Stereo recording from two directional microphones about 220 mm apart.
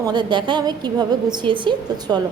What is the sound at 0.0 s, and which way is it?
A woman's voice, 20° right (ahead or behind).